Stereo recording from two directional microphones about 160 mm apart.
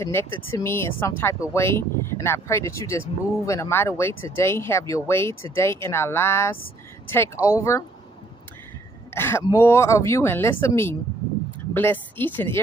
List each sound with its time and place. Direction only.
0.0 s speech: 15° left (ahead or behind)
9.1 s speech: 15° left (ahead or behind)